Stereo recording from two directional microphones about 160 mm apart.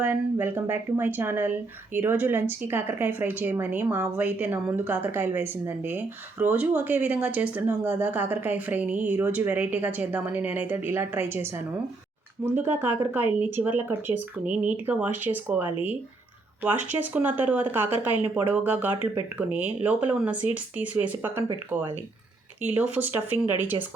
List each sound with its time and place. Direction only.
0.0 s speech: 15° right (ahead or behind)